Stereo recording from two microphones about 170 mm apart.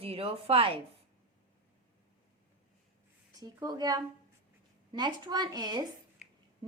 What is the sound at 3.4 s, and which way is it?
A woman's voice, 20° right (ahead or behind).